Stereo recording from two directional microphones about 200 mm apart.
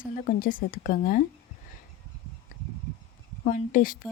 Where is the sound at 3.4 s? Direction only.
45° left (ahead or behind).